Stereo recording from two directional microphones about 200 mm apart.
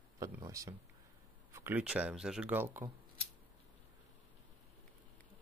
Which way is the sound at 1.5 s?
10° right (ahead or behind).